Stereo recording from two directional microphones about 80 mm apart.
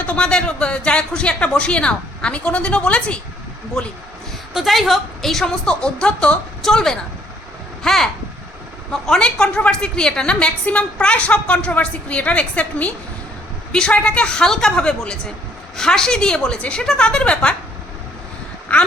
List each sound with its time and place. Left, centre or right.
0.0 s a woman's voice: centre
18.7 s speech: centre